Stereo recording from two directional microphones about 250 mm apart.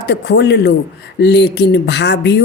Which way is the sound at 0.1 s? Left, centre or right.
Left.